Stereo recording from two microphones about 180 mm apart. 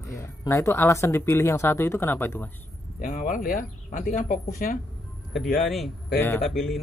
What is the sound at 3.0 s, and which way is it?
Speech, 50° left (ahead or behind).